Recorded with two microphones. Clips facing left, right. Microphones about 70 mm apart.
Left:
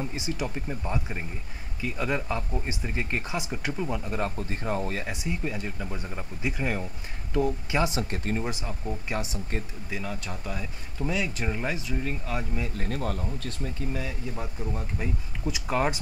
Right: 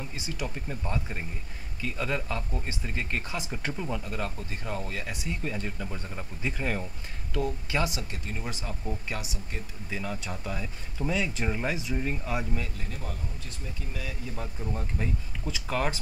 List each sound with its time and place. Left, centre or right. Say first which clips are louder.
0.0 s speech: left 4 dB; left
3.5 s speech: left 1 dB; centre
4.0 s speech: left 4 dB; left
4.4 s speech: left 5 dB; left
5.0 s speech: left 3 dB; left
5.4 s speech: left 1 dB; centre
7.3 s speech: left 4 dB; left
7.9 s speech: left 7 dB; left
8.4 s speech: left 5 dB; centre
9.2 s speech: left 6 dB; left
9.8 s speech: even; centre
12.7 s speech: left 8 dB; left
14.0 s speech: left 2 dB; centre
15.5 s speech: left 3 dB; centre